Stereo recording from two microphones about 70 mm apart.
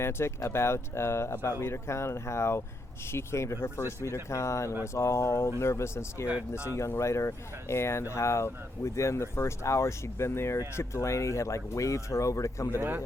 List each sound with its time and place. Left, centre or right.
0.0 s speech: left